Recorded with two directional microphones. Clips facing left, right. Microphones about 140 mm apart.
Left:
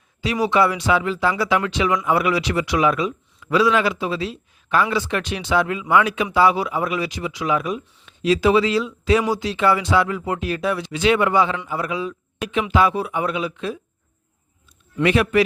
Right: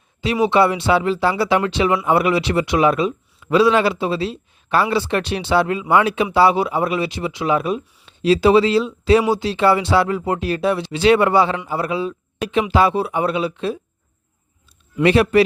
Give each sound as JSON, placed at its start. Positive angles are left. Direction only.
{"t": 0.2, "sound": "a man's voice", "side_deg": -25}
{"t": 15.0, "sound": "a man's voice", "side_deg": -35}